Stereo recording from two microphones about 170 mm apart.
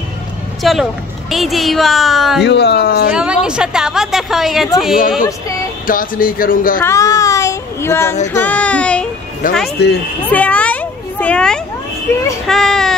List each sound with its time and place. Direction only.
0.6 s a woman's voice: centre (ahead or behind)
2.4 s speech: 80° left
3.1 s a woman's voice: 5° right (ahead or behind)
5.9 s speech: 55° left (ahead or behind)
6.8 s child singing: 20° left (ahead or behind)
9.4 s speech: 50° left (ahead or behind)
9.8 s speech: 75° left (ahead or behind)
10.3 s a sound: 10° left (ahead or behind)
12.1 s child singing: 15° left (ahead or behind)
12.4 s a woman's voice: 5° left (ahead or behind)